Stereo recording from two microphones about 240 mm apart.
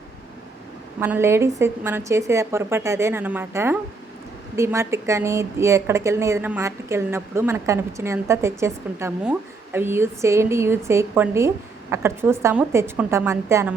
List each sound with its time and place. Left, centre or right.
0.9 s a woman's voice: centre